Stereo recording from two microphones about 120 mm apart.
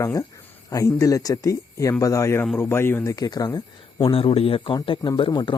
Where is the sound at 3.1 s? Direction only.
30° left (ahead or behind).